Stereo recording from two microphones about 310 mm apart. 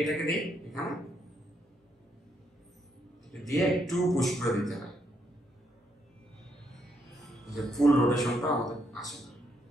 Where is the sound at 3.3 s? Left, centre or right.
Centre.